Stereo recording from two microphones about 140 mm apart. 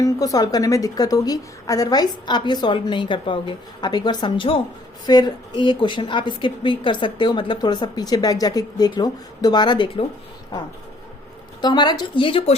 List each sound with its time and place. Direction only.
0.0 s a woman's voice: 25° left (ahead or behind)
11.6 s a woman's voice: 30° left (ahead or behind)